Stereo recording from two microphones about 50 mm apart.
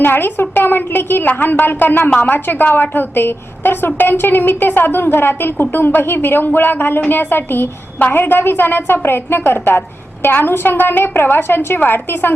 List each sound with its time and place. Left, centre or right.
0.0 s a woman's voice: left